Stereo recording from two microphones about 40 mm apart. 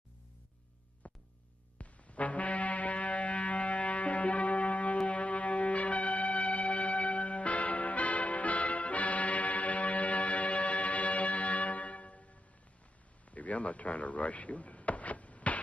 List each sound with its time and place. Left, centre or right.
1.0 s music: left
5.0 s shofar: left
13.3 s a sound: left